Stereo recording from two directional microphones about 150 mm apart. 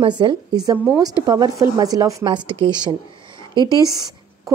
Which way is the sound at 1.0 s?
25° right (ahead or behind).